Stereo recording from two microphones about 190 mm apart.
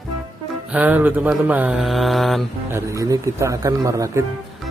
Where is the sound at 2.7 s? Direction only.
15° right (ahead or behind).